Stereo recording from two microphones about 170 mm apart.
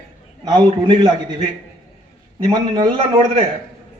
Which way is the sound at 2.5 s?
25° right (ahead or behind).